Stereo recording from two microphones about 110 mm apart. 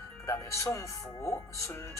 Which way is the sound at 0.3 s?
25° left (ahead or behind).